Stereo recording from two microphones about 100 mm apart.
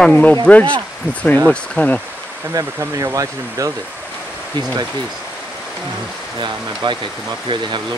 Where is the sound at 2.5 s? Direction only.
35° right (ahead or behind).